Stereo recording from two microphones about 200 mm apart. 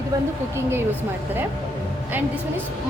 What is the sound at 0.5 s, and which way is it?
Speech, 10° right (ahead or behind).